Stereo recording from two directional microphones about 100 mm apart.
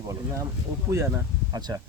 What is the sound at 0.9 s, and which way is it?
Speech, 25° right (ahead or behind).